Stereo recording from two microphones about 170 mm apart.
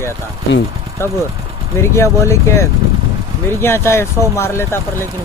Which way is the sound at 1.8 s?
15° left (ahead or behind).